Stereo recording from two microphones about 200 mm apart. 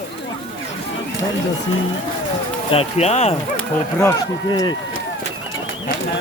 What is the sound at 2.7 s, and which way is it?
Speech, 30° left (ahead or behind).